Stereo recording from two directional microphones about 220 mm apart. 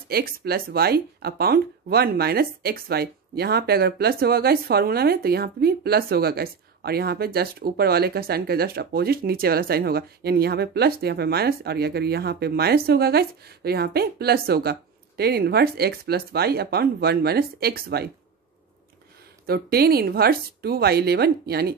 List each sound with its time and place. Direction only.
0.1 s speech: 45° right (ahead or behind)
19.4 s speech: 45° right (ahead or behind)